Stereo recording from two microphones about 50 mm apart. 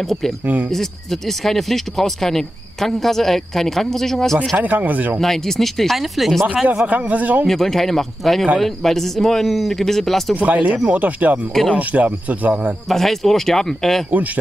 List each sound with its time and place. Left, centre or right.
1.4 s speech: centre
4.6 s speech: right
5.2 s speech: centre
6.4 s speech: right
6.8 s speech: right
7.4 s speech: centre
10.3 s speech: right
12.9 s speech: centre